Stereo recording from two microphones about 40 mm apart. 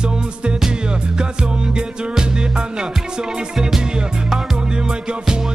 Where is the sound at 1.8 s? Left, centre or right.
Centre.